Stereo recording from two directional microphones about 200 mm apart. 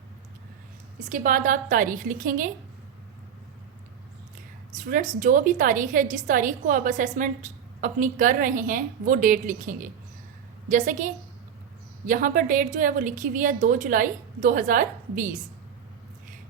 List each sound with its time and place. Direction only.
0.9 s a woman's voice: 40° right (ahead or behind)
4.8 s a woman's voice: 40° right (ahead or behind)